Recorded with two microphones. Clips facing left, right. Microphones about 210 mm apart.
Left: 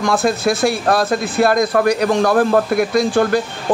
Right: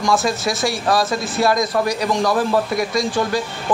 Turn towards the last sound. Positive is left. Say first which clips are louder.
# left 5 dB
turn(degrees=60)  # may be behind; listen again after turning